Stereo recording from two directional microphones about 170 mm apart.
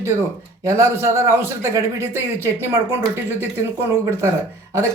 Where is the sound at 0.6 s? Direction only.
15° right (ahead or behind).